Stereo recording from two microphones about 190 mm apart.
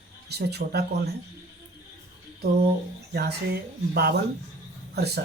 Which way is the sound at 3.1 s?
60° right (ahead or behind).